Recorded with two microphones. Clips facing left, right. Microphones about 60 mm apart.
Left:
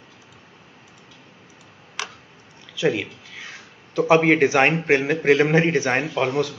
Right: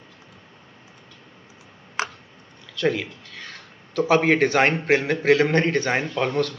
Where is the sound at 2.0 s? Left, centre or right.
Right.